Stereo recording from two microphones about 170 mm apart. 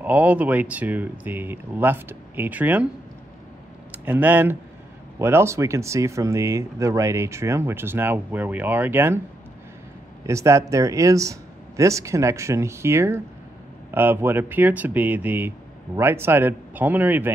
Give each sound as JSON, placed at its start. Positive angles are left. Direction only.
{"t": 0.0, "sound": "speech", "side_deg": -10}
{"t": 3.9, "sound": "speech", "side_deg": -10}
{"t": 10.2, "sound": "speech", "side_deg": -15}